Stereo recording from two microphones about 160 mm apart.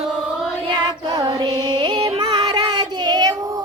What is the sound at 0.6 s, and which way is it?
Music, 25° right (ahead or behind).